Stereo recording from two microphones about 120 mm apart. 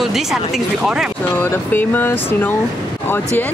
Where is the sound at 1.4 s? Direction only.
15° left (ahead or behind).